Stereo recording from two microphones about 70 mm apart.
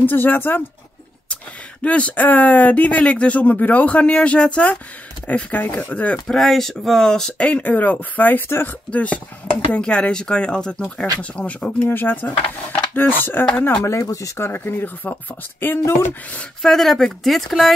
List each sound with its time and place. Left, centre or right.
0.0 s speech: left
6.2 s speech: centre; by 8.7 s left
8.9 s speech: left
13.5 s speech: centre
14.0 s speech: left
14.4 s speech: left
16.0 s speech: left
16.6 s speech: centre